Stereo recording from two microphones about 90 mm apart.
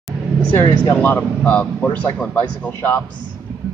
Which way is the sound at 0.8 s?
20° left (ahead or behind).